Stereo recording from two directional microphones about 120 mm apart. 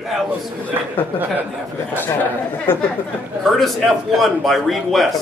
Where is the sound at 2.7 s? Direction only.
20° left (ahead or behind).